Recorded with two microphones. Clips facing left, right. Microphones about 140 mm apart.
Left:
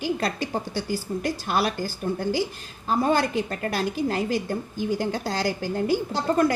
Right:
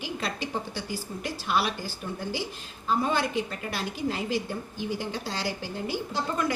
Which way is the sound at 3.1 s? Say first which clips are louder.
Left 5 dB; 45° left (ahead or behind).